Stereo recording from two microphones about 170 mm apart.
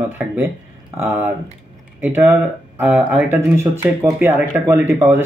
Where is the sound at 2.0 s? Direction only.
10° right (ahead or behind).